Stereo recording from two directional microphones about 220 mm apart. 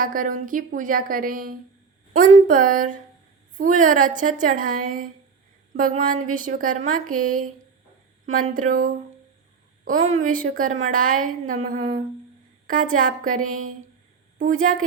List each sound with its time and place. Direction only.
0.0 s a woman's voice: 40° right (ahead or behind)
13.4 s speech: 70° right (ahead or behind)
14.3 s a woman's voice: 35° right (ahead or behind)